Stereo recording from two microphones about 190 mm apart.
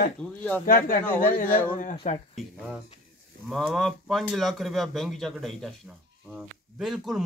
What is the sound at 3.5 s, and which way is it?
Speech, centre (ahead or behind).